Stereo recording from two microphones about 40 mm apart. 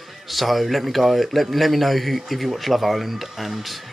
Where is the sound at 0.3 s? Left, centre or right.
Centre.